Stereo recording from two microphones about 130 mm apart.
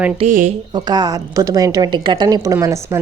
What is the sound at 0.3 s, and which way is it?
Speech, 75° right (ahead or behind).